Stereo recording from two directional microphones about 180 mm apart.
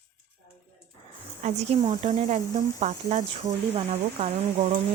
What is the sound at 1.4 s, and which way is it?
Speech, 40° right (ahead or behind).